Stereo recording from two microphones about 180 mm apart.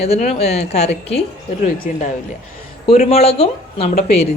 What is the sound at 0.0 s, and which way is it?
Speech, 35° left (ahead or behind).